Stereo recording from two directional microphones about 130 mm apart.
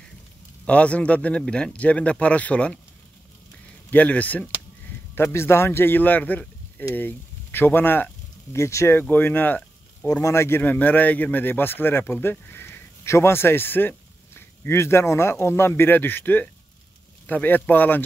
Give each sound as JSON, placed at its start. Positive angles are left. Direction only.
{"t": 0.7, "sound": "speech", "side_deg": 10}
{"t": 3.9, "sound": "speech", "side_deg": 10}